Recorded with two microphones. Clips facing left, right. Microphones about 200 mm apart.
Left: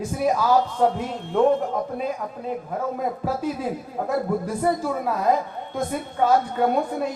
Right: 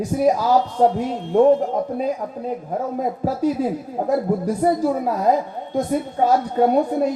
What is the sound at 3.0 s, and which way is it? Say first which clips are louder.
Speech: right 4 dB; 40° right (ahead or behind).